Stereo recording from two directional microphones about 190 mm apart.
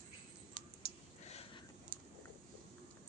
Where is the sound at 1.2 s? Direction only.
35° left (ahead or behind).